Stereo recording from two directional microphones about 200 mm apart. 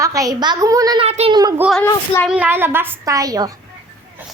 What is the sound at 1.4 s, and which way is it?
Speech, 20° right (ahead or behind).